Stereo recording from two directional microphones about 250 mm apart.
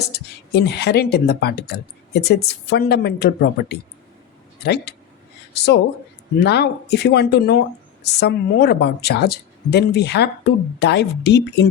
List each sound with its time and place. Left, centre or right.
0.1 s speech: left